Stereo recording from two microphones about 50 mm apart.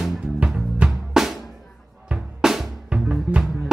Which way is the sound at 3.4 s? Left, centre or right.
Centre.